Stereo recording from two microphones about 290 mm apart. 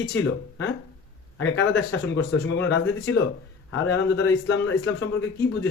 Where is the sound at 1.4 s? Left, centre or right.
Left.